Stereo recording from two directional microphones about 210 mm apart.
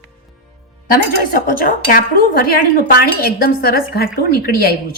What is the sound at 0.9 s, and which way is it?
Speech, 40° left (ahead or behind).